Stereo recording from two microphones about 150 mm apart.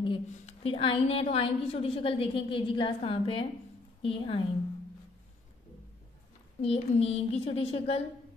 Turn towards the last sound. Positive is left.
turn(degrees=40)  # may be behind; listen again after turning